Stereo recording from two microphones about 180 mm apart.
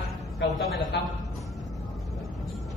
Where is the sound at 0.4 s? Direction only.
75° left (ahead or behind).